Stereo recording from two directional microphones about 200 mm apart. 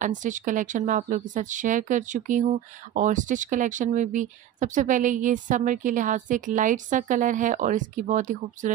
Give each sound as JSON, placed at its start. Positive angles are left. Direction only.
{"t": 0.0, "sound": "speech", "side_deg": -40}